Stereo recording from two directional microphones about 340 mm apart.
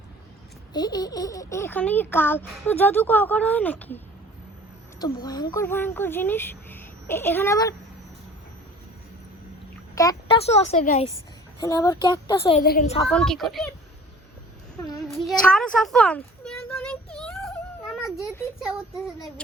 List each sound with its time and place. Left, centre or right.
0.7 s a child's voice: centre
9.9 s a woman's voice: centre
13.1 s a child's voice: centre
14.8 s child singing: centre
15.0 s a sound: centre